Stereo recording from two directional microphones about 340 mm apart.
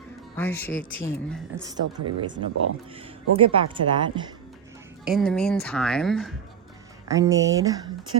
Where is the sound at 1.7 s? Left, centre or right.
Centre.